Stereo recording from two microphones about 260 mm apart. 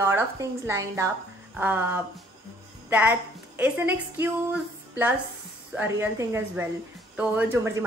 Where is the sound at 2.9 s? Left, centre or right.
Centre.